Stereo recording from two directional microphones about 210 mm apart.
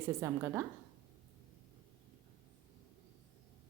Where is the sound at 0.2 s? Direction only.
15° right (ahead or behind).